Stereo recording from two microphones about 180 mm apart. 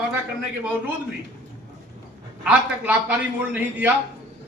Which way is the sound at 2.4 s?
10° right (ahead or behind).